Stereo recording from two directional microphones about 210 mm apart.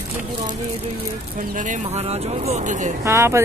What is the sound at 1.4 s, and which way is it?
Speech, 35° right (ahead or behind).